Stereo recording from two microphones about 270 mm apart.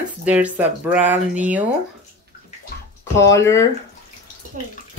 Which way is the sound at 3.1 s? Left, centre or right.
Centre.